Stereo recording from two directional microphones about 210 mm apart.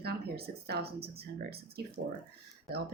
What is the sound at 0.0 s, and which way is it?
Speech, 50° right (ahead or behind).